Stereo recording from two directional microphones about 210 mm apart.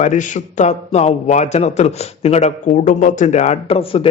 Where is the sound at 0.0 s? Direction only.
35° left (ahead or behind).